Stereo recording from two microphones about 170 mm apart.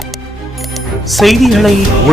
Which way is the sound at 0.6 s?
Centre (ahead or behind).